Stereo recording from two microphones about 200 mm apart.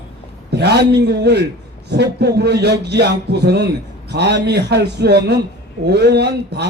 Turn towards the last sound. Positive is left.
turn(degrees=-55)  # may be behind; listen again after turning